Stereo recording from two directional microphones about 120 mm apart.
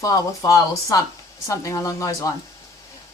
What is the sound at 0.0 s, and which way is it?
A woman's voice, 30° left (ahead or behind).